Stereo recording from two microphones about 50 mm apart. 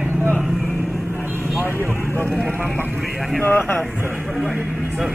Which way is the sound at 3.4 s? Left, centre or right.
Left.